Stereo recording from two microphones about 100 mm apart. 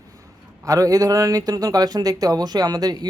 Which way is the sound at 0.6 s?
35° right (ahead or behind).